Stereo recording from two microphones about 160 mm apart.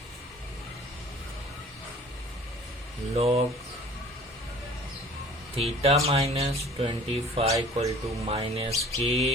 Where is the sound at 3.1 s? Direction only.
40° right (ahead or behind).